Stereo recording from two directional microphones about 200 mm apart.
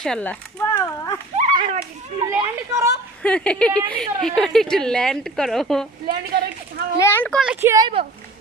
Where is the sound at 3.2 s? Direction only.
5° left (ahead or behind).